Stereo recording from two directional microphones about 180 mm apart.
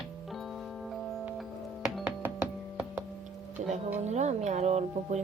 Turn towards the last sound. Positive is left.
turn(degrees=-40)  # may be behind; listen again after turning